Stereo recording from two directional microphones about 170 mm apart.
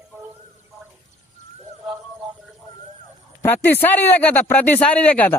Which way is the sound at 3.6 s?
10° left (ahead or behind).